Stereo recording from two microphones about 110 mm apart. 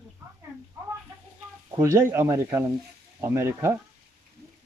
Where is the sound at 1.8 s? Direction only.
25° right (ahead or behind).